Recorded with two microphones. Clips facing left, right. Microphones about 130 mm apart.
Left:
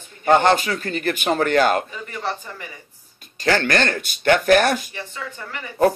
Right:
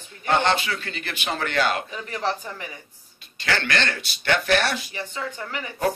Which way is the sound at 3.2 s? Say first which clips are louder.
Left 7 dB; 40° left (ahead or behind).